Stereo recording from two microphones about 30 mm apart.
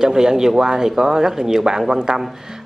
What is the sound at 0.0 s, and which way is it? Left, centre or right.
Speech, centre.